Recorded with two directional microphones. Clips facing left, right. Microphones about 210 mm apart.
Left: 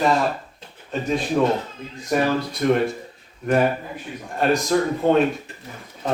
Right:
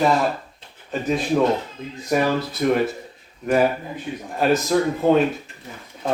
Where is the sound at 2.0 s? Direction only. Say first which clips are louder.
Even; 5° right (ahead or behind).